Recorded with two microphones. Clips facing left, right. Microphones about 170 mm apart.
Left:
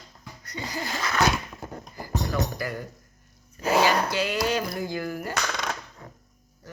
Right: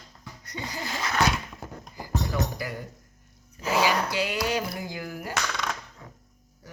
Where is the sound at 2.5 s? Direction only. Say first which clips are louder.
Left 2 dB; 15° right (ahead or behind).